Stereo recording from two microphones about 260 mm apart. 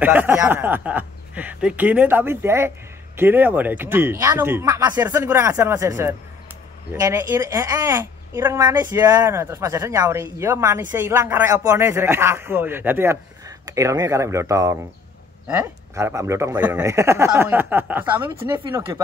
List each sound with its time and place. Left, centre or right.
0.0 s speech: centre
18.5 s speech: centre